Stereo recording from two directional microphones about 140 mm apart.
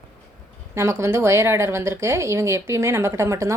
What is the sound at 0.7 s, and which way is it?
Speech, 20° right (ahead or behind).